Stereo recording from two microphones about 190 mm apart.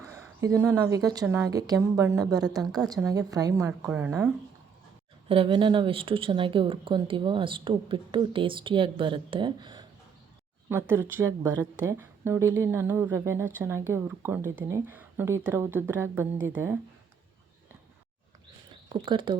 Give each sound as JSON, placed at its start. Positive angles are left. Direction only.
{"t": 0.0, "sound": "a woman's voice", "side_deg": -15}
{"t": 5.3, "sound": "speech", "side_deg": -30}
{"t": 10.7, "sound": "a woman's voice", "side_deg": -10}
{"t": 18.7, "sound": "speech", "side_deg": -25}